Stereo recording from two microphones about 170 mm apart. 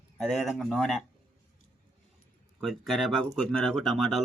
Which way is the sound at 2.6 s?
Centre (ahead or behind).